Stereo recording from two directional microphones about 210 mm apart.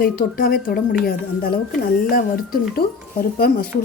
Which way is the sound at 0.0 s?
45° left (ahead or behind).